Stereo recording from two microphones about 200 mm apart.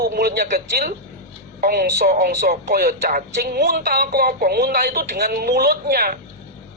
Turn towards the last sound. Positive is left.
turn(degrees=-50)  # may be behind; listen again after turning